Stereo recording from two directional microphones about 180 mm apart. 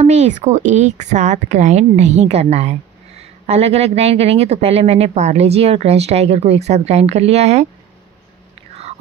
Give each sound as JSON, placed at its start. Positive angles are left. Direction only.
{"t": 0.0, "sound": "speech", "side_deg": -40}